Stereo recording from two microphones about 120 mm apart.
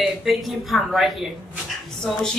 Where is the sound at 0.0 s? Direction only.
Centre (ahead or behind).